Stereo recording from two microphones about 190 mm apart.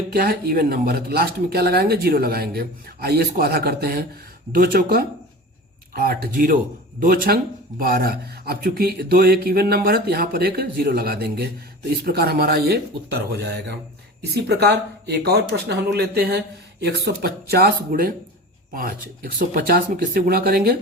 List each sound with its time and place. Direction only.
0.1 s speech: 50° right (ahead or behind)
14.4 s speech: 60° right (ahead or behind)